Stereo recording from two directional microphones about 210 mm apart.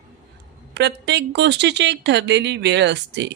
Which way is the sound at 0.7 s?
55° right (ahead or behind).